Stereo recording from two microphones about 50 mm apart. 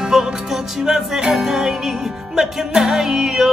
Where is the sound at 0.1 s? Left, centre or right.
Centre.